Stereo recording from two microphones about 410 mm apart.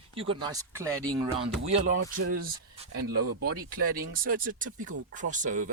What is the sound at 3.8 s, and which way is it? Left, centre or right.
Speech, right.